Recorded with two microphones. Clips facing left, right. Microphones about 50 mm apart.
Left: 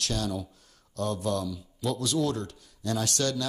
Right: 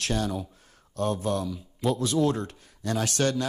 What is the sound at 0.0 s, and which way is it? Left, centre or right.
A man's voice, right.